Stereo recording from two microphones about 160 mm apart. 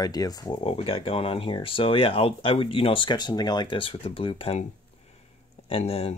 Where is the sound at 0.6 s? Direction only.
35° left (ahead or behind).